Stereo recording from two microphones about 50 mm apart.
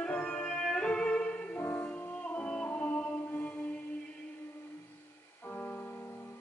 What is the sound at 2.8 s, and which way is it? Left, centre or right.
Mantra, left.